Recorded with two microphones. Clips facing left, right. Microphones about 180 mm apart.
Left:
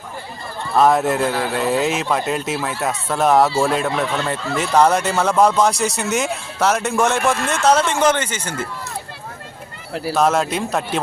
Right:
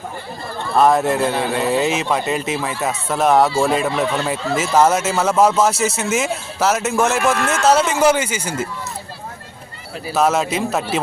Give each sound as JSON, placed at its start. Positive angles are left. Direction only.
{"t": 0.8, "sound": "speech", "side_deg": 0}
{"t": 9.9, "sound": "speech", "side_deg": 70}
{"t": 10.2, "sound": "speech", "side_deg": 0}